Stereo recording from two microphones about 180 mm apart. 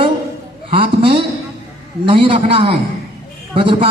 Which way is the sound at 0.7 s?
30° right (ahead or behind).